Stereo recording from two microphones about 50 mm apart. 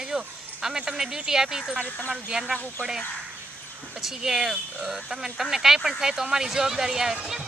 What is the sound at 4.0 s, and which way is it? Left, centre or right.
Speech, centre.